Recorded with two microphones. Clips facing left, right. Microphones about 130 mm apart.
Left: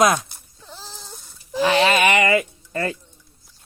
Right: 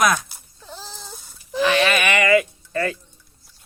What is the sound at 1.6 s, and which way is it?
Speech, 30° left (ahead or behind).